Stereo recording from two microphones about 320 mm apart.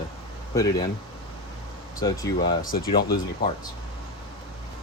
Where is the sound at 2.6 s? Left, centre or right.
Left.